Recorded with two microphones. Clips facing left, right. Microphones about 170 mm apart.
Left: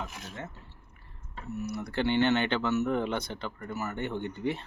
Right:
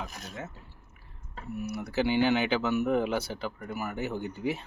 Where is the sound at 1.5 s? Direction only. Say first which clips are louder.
Even; 10° right (ahead or behind).